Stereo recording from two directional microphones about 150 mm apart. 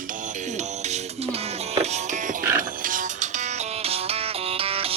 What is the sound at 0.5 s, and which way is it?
Music, 45° right (ahead or behind).